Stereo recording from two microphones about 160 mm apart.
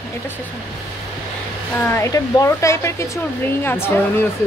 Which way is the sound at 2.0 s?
20° left (ahead or behind).